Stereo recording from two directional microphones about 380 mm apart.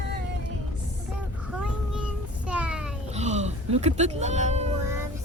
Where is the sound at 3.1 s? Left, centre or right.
Centre.